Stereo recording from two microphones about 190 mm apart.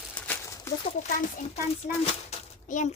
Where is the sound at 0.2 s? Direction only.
10° left (ahead or behind).